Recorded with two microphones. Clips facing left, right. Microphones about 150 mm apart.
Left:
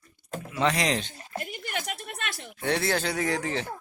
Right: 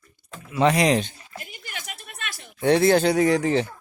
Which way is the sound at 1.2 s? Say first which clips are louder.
Left 5 dB; 45° left (ahead or behind).